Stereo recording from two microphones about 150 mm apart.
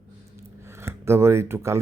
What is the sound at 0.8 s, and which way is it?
Speech, 15° right (ahead or behind).